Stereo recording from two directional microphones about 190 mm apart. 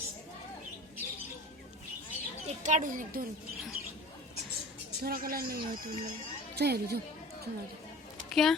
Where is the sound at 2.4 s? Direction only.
40° right (ahead or behind).